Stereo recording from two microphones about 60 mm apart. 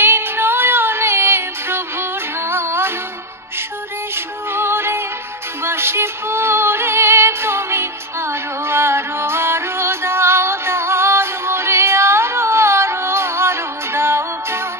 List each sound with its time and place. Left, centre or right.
0.0 s music: right
4.1 s music: right